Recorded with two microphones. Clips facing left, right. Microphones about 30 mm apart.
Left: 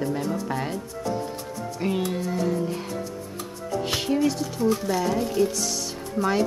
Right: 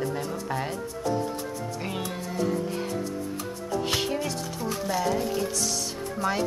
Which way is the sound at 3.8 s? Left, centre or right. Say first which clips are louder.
Left 6 dB; centre.